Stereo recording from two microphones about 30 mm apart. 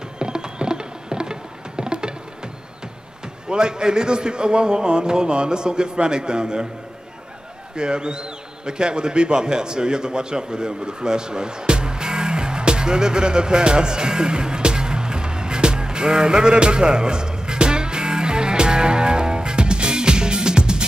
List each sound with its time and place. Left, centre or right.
0.2 s music: right
3.4 s a man's voice: right
7.7 s a sound: right